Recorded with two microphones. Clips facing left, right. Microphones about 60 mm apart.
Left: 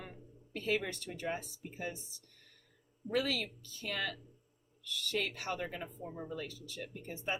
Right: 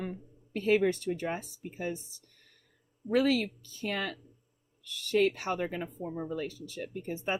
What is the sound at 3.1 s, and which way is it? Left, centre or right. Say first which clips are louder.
Speech: right 8 dB; right.